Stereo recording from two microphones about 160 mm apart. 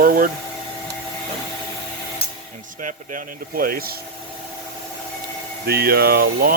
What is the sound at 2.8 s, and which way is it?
Speech, 60° right (ahead or behind).